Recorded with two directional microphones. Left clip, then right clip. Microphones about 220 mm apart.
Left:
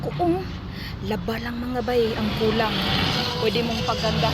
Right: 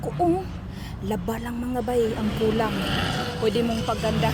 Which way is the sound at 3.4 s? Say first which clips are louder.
Right 2 dB; 20° right (ahead or behind).